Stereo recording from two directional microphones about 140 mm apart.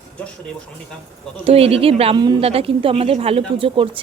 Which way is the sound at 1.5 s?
45° right (ahead or behind).